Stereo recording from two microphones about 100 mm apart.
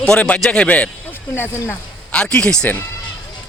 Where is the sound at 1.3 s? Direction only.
25° left (ahead or behind).